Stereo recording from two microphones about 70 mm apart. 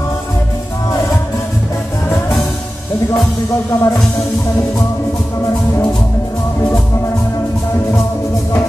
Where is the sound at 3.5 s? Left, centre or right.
Left.